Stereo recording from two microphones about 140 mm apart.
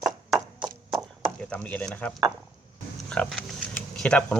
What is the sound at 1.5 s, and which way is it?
Stir, 10° left (ahead or behind).